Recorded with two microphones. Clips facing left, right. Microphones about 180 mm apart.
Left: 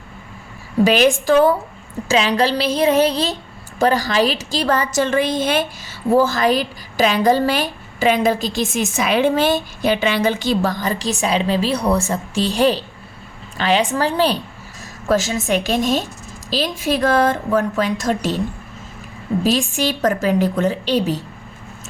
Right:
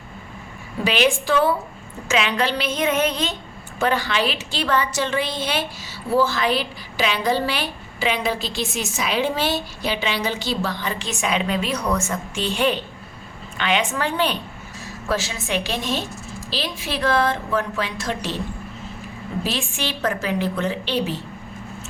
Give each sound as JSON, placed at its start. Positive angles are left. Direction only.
{"t": 0.9, "sound": "a woman's voice", "side_deg": 45}
{"t": 19.5, "sound": "a woman's voice", "side_deg": 40}